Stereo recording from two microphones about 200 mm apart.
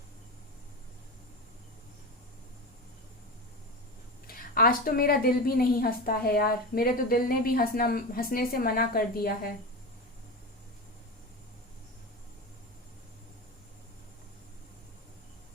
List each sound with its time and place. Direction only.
4.3 s a woman's voice: 45° left (ahead or behind)